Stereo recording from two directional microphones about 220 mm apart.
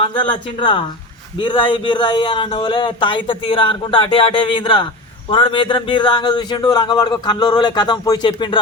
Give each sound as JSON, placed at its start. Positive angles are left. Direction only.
{"t": 0.0, "sound": "speech", "side_deg": 20}